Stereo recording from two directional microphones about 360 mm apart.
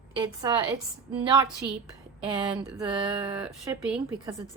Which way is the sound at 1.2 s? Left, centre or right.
Centre.